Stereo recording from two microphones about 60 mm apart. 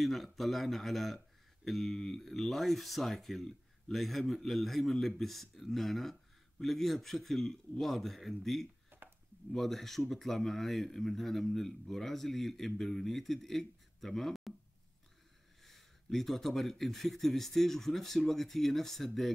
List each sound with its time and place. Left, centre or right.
0.0 s speech: centre
8.9 s a sound: right
9.5 s speech: centre
15.6 s speech: centre